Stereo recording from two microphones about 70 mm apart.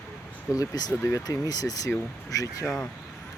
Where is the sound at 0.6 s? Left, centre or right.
Left.